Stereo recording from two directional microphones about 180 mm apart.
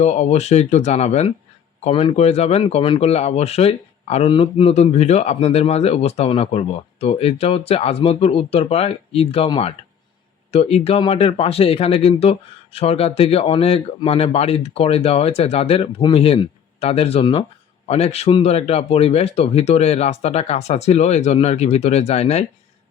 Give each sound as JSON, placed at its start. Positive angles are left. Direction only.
{"t": 0.0, "sound": "speech", "side_deg": 40}